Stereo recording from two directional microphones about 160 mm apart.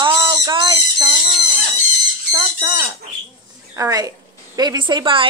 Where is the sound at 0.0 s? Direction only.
30° right (ahead or behind).